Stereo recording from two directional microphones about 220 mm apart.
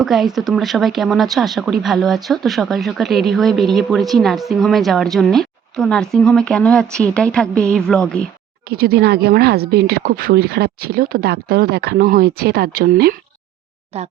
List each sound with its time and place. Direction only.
0.0 s speech: centre (ahead or behind)
8.7 s speech: 45° right (ahead or behind)
13.9 s speech: 30° right (ahead or behind)